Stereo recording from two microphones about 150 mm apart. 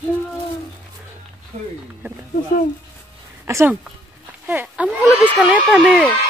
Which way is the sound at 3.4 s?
15° right (ahead or behind).